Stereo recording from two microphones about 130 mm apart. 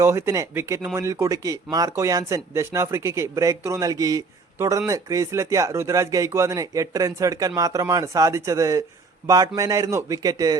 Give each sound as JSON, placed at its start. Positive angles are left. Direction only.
{"t": 0.0, "sound": "speech", "side_deg": -20}